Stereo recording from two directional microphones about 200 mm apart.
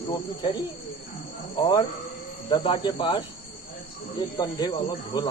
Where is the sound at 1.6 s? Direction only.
20° left (ahead or behind).